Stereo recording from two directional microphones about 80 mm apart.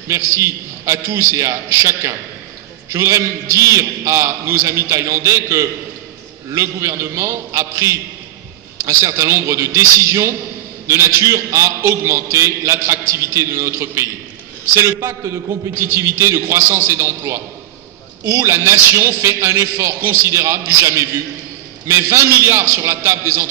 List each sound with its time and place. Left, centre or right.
0.1 s a man's voice: right